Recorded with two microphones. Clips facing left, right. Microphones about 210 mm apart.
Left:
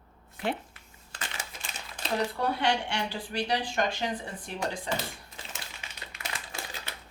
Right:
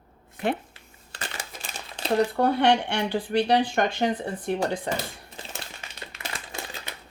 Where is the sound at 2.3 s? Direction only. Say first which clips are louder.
Right 7 dB; 55° right (ahead or behind).